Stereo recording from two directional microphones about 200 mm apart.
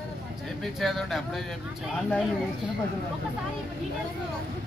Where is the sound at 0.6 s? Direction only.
Centre (ahead or behind).